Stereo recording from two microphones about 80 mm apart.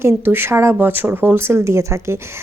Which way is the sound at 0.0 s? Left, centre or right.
Right.